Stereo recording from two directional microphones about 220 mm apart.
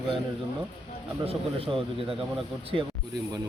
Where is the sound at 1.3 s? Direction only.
25° right (ahead or behind).